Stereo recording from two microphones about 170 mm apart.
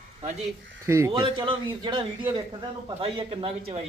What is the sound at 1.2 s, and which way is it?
A man's voice, 30° right (ahead or behind).